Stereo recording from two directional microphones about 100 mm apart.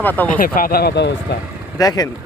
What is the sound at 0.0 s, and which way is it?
Speech, 15° left (ahead or behind).